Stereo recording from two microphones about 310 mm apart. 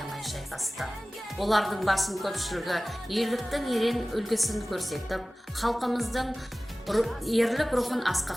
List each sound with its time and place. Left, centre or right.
0.0 s music: centre
1.4 s speech: centre